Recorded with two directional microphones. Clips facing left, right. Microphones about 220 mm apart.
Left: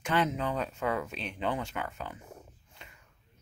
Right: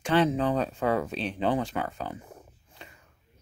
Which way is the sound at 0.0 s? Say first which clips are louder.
Right 6 dB; 30° right (ahead or behind).